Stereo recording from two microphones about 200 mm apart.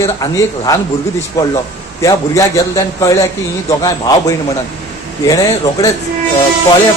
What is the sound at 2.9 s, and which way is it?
A man's voice, 15° left (ahead or behind).